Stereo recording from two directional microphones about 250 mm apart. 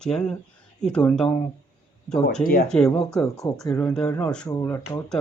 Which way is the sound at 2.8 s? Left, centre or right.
Centre.